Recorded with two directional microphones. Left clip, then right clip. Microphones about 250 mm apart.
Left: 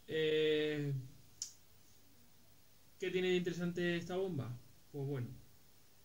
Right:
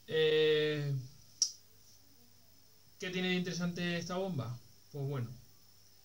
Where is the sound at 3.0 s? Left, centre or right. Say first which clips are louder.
Left 1 dB; centre.